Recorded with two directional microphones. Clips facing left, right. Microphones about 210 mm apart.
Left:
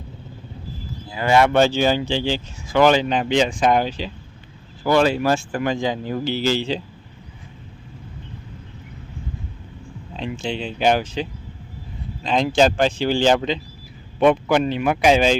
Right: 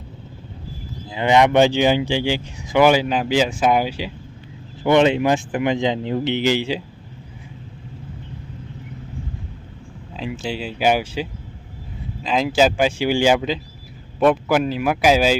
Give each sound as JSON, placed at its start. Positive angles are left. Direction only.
{"t": 1.1, "sound": "speech", "side_deg": -20}
{"t": 4.8, "sound": "speech", "side_deg": -20}
{"t": 10.2, "sound": "speech", "side_deg": -5}